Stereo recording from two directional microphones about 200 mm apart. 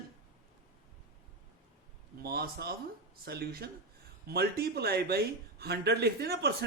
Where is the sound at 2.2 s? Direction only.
50° right (ahead or behind).